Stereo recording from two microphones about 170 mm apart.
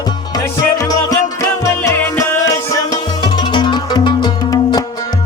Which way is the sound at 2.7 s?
25° left (ahead or behind).